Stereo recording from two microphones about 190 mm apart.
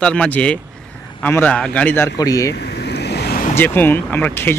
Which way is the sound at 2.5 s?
60° left (ahead or behind).